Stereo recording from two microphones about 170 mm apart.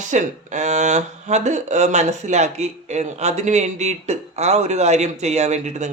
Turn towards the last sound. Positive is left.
turn(degrees=-40)  # may be behind; listen again after turning